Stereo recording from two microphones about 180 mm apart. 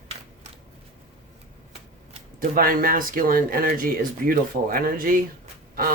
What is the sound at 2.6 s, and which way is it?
Speech, 55° right (ahead or behind).